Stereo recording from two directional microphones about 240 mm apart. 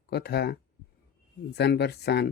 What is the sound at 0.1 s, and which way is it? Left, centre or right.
Speech, left.